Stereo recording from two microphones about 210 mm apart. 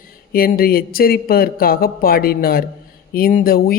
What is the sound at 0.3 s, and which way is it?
A man's voice, 45° left (ahead or behind).